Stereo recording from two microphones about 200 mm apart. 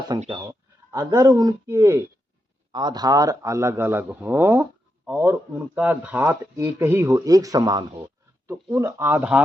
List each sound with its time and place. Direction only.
0.1 s speech: 20° right (ahead or behind)
8.7 s speech: 10° right (ahead or behind)